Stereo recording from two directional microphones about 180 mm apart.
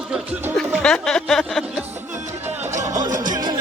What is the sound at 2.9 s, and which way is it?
Music, 20° right (ahead or behind).